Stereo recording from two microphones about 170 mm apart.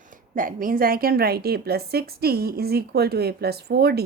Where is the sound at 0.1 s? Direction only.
55° right (ahead or behind).